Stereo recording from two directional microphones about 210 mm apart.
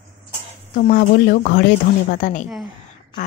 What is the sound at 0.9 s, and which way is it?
Speech, 45° left (ahead or behind).